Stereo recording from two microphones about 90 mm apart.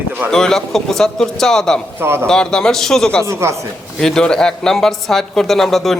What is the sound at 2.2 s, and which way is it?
A man's voice, 10° left (ahead or behind).